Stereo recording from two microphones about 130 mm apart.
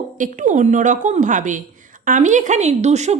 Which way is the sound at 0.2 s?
85° right.